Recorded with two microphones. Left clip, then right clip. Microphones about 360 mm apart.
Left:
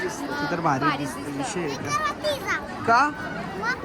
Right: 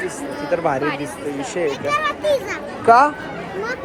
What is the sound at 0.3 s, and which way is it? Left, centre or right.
Speech, centre.